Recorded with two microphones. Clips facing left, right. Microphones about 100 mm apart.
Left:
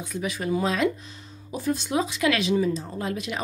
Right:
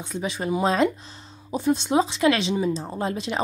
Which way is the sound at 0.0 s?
25° right (ahead or behind).